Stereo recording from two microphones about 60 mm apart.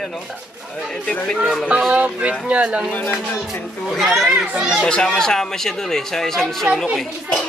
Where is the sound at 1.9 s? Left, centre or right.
Right.